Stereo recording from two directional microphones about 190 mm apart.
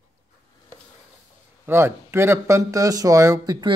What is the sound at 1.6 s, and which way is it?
Speech, 10° right (ahead or behind).